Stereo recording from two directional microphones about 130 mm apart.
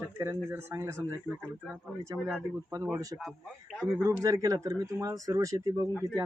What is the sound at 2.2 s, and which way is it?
Speech, 5° right (ahead or behind).